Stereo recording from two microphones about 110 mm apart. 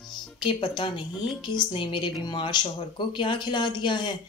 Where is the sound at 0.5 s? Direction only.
45° left (ahead or behind).